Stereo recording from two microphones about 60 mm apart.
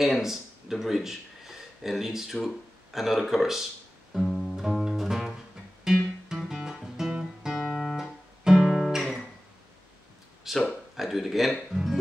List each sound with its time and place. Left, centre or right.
0.0 s speech: centre
4.1 s guitar: centre
4.6 s music: centre
6.2 s guitar: centre
10.5 s a sound: centre
11.7 s music: centre